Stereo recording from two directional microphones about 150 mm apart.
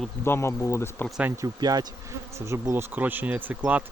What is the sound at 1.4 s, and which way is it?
Speech, 25° right (ahead or behind).